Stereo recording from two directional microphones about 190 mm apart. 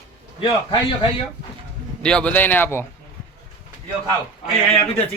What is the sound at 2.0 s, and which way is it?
Speech, 5° left (ahead or behind).